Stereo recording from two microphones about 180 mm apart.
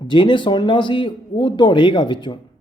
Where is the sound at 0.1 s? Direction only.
25° left (ahead or behind).